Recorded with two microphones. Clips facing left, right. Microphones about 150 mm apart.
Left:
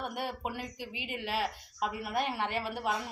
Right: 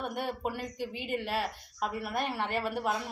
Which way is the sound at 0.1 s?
45° right (ahead or behind).